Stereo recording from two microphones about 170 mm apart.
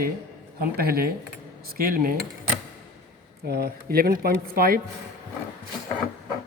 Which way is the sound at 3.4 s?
70° right (ahead or behind).